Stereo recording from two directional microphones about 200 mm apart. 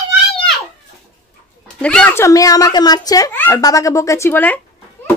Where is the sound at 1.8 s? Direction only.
5° left (ahead or behind).